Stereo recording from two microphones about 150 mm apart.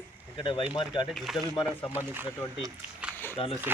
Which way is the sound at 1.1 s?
Centre (ahead or behind).